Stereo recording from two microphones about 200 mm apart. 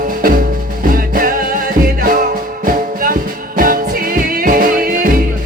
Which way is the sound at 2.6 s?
45° right (ahead or behind).